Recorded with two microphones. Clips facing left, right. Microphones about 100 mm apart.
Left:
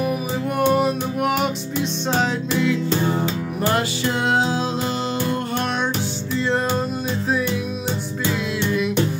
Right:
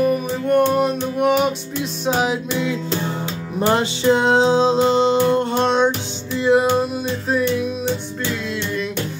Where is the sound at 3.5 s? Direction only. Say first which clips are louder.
Right 5 dB; 25° right (ahead or behind).